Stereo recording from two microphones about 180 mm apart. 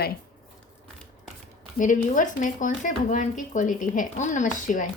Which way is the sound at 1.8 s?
45° left (ahead or behind).